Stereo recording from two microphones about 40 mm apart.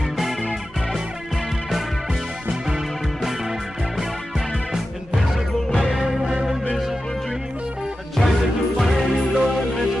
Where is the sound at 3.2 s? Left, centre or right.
Centre.